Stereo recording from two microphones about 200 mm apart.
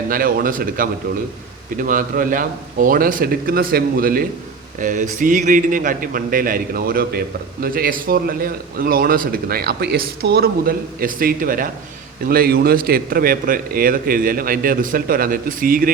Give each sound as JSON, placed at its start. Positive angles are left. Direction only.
{"t": 0.1, "sound": "a man's voice", "side_deg": -45}